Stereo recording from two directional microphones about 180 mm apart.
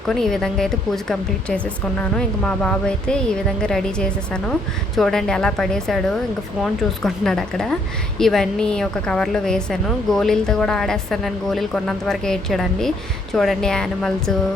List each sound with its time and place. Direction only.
0.1 s a woman's voice: centre (ahead or behind)